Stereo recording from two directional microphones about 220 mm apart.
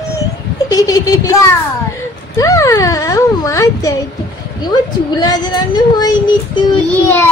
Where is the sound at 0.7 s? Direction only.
15° left (ahead or behind).